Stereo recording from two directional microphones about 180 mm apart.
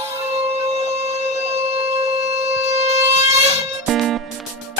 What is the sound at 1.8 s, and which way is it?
Wind instrument, 35° right (ahead or behind).